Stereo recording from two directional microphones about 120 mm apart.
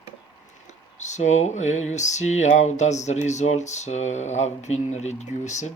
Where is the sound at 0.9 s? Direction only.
80° left.